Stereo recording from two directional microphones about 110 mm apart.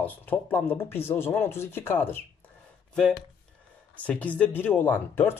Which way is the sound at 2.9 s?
5° left (ahead or behind).